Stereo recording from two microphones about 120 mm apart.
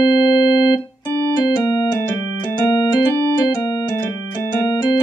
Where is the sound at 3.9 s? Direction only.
15° left (ahead or behind).